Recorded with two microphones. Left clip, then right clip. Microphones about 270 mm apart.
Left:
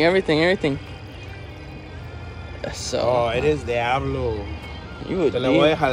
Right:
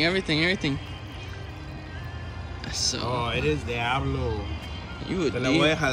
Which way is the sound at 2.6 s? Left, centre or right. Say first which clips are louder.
Left 5 dB; centre.